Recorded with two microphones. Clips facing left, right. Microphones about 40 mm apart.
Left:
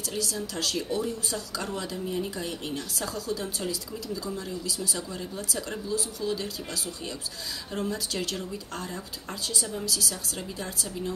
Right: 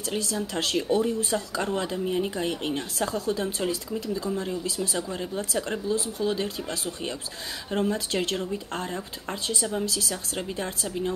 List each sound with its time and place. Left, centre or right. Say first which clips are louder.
0.1 s speech: right 4 dB; right